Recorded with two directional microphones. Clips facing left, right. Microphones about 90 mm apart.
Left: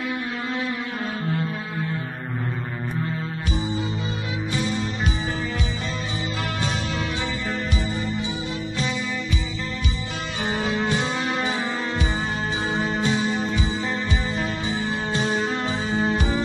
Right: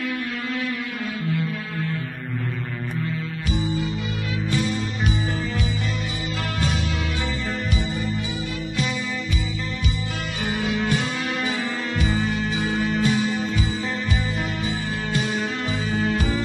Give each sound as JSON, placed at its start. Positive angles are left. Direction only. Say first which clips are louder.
{"t": 0.0, "sound": "music", "louder": "even", "side_deg": 25}
{"t": 10.4, "sound": "music", "louder": "even", "side_deg": 30}
{"t": 15.0, "sound": "music", "louder": "left 1 dB", "side_deg": 30}